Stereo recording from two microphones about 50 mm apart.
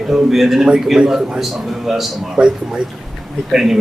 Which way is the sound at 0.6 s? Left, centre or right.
Centre.